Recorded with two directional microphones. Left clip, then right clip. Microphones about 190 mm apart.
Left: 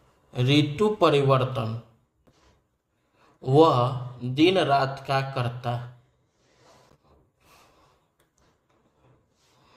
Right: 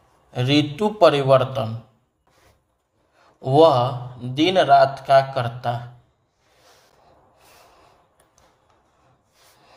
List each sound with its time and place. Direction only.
0.3 s speech: 25° right (ahead or behind)
3.4 s speech: 25° right (ahead or behind)